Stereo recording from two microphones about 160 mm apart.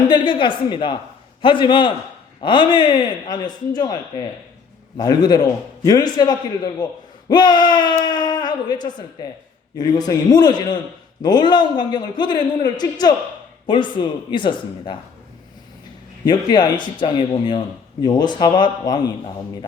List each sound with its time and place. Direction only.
0.1 s a man's voice: 30° left (ahead or behind)
16.2 s speech: 25° left (ahead or behind)